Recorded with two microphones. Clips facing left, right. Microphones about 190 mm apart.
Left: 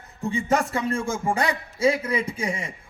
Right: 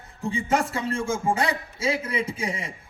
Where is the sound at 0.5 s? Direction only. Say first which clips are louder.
Left 2 dB; 30° right (ahead or behind).